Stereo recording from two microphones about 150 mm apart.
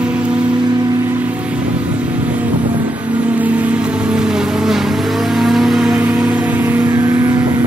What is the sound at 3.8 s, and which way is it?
Music, 5° right (ahead or behind).